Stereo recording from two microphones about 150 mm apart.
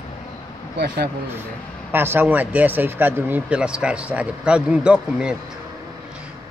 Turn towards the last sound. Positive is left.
turn(degrees=-5)  # may be behind; listen again after turning